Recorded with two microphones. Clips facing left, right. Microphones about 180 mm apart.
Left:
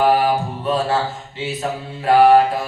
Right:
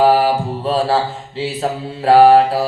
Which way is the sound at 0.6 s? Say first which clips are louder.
Right 4 dB; 30° right (ahead or behind).